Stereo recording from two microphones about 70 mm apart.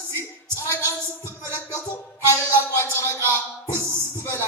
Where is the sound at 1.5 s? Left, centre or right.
Left.